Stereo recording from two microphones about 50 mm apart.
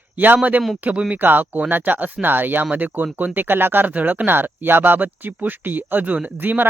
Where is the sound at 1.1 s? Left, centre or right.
Right.